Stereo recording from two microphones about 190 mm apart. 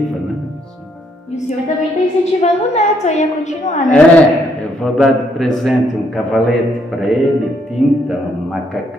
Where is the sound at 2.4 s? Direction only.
35° left (ahead or behind).